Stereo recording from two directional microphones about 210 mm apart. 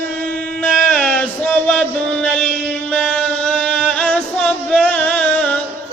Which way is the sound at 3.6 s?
5° left (ahead or behind).